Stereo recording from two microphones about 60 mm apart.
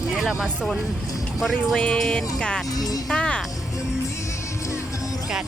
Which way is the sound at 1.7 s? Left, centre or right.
Centre.